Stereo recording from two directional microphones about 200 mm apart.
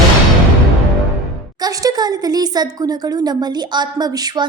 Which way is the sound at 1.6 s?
20° right (ahead or behind).